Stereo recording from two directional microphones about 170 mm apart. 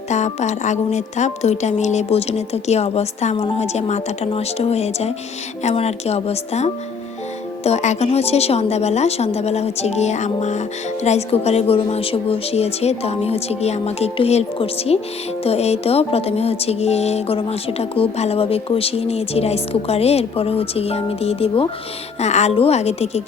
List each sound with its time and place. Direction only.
0.1 s speech: 45° left (ahead or behind)